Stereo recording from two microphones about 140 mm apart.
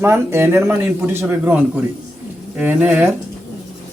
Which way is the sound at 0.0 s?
20° right (ahead or behind).